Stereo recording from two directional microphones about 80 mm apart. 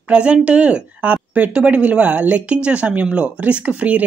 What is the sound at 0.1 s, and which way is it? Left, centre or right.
A woman's voice, centre.